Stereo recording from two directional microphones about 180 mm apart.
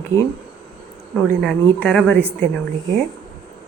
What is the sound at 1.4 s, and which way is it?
Speech, 5° left (ahead or behind).